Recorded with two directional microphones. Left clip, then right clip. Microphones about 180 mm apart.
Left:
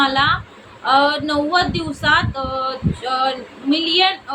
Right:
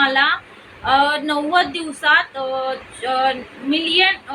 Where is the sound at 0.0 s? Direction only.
10° left (ahead or behind).